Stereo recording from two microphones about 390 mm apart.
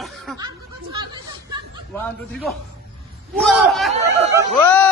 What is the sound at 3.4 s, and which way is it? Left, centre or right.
A man's voice, centre.